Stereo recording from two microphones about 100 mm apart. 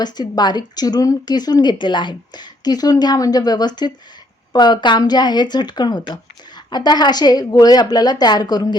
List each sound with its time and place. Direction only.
0.0 s speech: 45° left (ahead or behind)